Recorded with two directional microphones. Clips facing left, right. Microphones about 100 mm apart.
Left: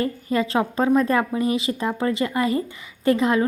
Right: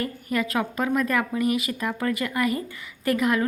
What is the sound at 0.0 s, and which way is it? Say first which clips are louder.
A woman's voice: left 4 dB; 25° left (ahead or behind).